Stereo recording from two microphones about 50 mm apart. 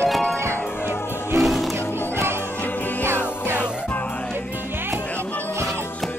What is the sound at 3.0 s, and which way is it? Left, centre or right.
Music, right.